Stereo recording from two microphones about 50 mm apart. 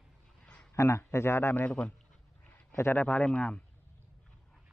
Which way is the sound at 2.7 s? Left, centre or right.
Left.